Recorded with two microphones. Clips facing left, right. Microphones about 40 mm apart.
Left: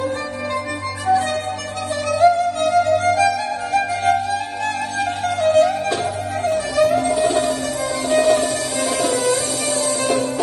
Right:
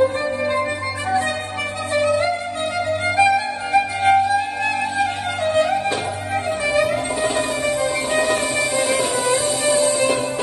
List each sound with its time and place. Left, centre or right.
2.0 s music: right